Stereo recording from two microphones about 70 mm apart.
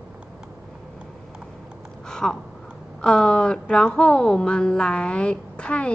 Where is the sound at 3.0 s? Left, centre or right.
Centre.